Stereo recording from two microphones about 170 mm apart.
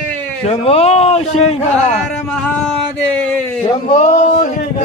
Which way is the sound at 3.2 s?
10° left (ahead or behind).